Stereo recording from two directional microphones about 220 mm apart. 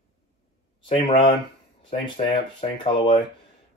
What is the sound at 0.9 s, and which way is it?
Speech, 20° left (ahead or behind).